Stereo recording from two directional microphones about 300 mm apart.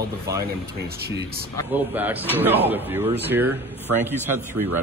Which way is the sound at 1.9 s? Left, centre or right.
Centre.